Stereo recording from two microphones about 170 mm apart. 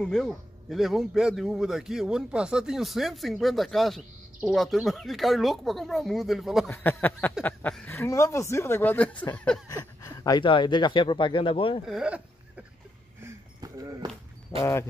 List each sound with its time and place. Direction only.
0.0 s a man's voice: 5° left (ahead or behind)
6.7 s speech: 10° left (ahead or behind)
9.7 s speech: 20° left (ahead or behind)
11.9 s a sound: 5° right (ahead or behind)
13.2 s a sound: 20° right (ahead or behind)
14.6 s speech: 15° left (ahead or behind)